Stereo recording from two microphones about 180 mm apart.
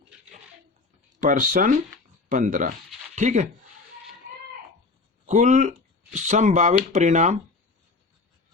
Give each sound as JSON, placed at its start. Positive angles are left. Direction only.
{"t": 1.2, "sound": "speech", "side_deg": -45}
{"t": 5.2, "sound": "speech", "side_deg": -45}